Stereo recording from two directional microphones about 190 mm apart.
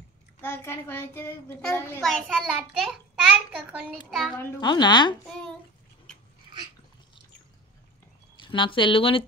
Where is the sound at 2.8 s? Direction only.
5° right (ahead or behind).